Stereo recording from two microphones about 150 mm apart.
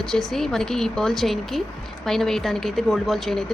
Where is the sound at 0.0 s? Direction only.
5° left (ahead or behind).